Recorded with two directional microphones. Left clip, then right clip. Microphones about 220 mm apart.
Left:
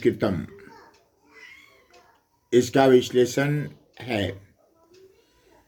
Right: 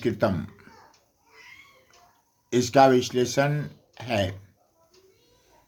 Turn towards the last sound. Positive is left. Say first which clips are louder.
# right 1 dB
turn(degrees=-20)  # may be behind; listen again after turning